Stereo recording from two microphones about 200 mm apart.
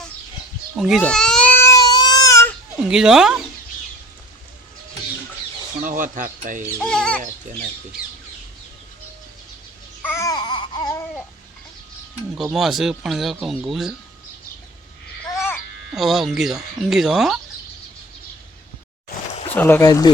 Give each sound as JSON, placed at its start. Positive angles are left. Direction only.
{"t": 0.8, "sound": "baby cry", "side_deg": 0}
{"t": 2.9, "sound": "speech", "side_deg": -5}
{"t": 5.8, "sound": "speech", "side_deg": -40}
{"t": 6.7, "sound": "speech", "side_deg": 5}
{"t": 10.0, "sound": "babbling", "side_deg": 10}
{"t": 12.4, "sound": "speech", "side_deg": 0}
{"t": 15.9, "sound": "speech", "side_deg": 0}
{"t": 19.3, "sound": "a sound", "side_deg": 35}
{"t": 19.5, "sound": "speech", "side_deg": 10}